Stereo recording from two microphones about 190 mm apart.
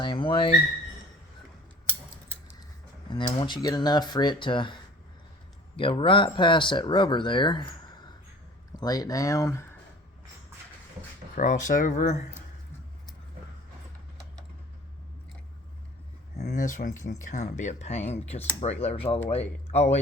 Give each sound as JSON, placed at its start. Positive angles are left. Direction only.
{"t": 0.0, "sound": "speech", "side_deg": 25}
{"t": 3.1, "sound": "speech", "side_deg": 25}
{"t": 11.3, "sound": "speech", "side_deg": 40}
{"t": 16.4, "sound": "speech", "side_deg": 50}